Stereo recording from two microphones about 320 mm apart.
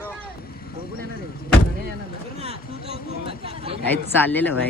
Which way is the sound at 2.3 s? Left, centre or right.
Centre.